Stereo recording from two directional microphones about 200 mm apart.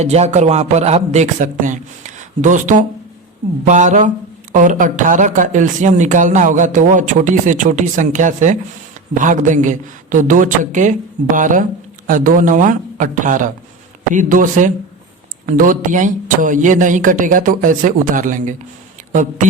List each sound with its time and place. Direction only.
0.0 s speech: 35° right (ahead or behind)